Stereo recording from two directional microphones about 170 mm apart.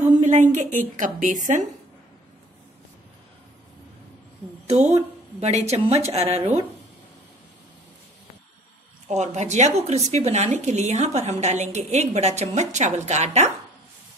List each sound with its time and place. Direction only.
0.2 s a woman's voice: 45° right (ahead or behind)
4.9 s speech: 40° right (ahead or behind)
9.0 s speech: 40° right (ahead or behind)